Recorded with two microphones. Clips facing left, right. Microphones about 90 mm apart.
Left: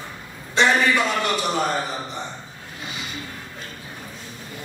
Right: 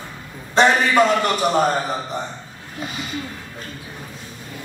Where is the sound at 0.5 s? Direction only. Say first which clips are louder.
Right 4 dB; 45° right (ahead or behind).